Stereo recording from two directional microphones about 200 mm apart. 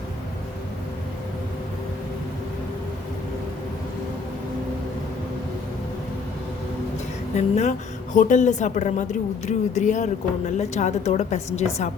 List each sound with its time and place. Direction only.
7.3 s speech: 35° left (ahead or behind)